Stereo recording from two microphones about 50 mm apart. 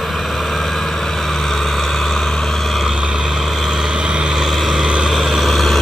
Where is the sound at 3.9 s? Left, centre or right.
Centre.